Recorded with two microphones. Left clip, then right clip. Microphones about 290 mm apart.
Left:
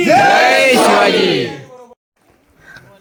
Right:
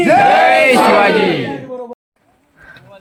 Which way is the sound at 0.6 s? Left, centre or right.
Centre.